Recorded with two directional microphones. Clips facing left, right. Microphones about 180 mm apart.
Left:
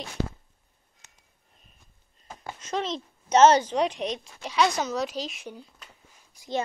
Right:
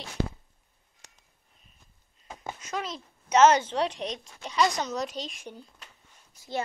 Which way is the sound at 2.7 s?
30° left (ahead or behind).